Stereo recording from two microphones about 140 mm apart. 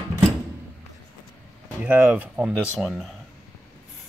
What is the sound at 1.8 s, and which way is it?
Speech, 10° right (ahead or behind).